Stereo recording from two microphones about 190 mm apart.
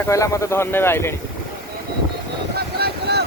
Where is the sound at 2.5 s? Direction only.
60° right (ahead or behind).